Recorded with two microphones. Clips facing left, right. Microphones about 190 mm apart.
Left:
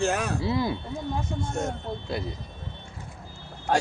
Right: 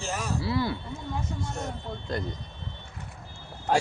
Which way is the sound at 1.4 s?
50° left (ahead or behind).